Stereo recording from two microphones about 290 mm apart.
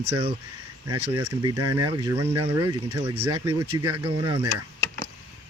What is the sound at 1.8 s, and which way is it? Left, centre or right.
Speech, centre.